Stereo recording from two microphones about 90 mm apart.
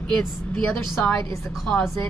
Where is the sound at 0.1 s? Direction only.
10° left (ahead or behind).